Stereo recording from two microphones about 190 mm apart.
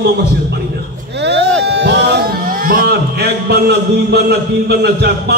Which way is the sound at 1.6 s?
65° right (ahead or behind).